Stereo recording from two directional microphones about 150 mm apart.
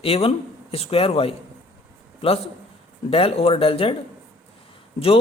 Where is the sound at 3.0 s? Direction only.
40° left (ahead or behind).